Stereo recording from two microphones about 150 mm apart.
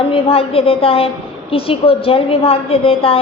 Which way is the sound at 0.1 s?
40° left (ahead or behind).